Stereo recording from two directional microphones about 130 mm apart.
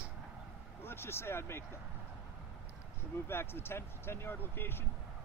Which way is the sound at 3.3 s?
20° left (ahead or behind).